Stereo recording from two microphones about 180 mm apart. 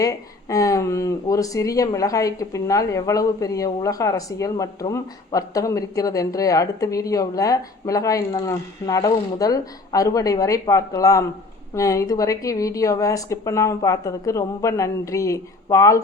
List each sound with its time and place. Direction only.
0.0 s speech: 20° left (ahead or behind)